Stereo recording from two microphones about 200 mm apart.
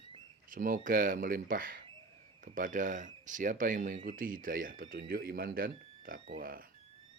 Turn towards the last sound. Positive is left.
turn(degrees=-45)  # may be behind; listen again after turning